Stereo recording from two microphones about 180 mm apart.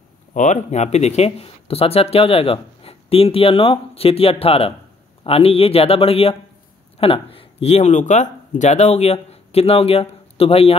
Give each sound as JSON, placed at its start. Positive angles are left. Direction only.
{"t": 0.3, "sound": "speech", "side_deg": 45}